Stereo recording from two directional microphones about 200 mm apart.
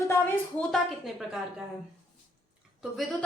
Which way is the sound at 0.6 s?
Centre (ahead or behind).